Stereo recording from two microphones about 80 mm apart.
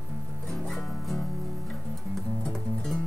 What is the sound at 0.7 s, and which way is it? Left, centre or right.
Music, centre.